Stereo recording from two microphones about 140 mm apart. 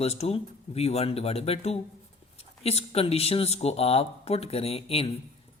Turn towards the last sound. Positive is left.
turn(degrees=45)  # may be behind; listen again after turning